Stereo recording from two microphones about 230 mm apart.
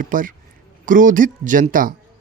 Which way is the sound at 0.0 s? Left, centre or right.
Right.